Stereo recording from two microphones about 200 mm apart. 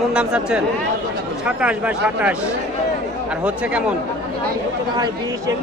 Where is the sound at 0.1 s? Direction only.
5° right (ahead or behind).